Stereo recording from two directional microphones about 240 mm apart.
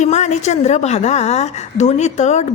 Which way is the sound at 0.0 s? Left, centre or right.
Left.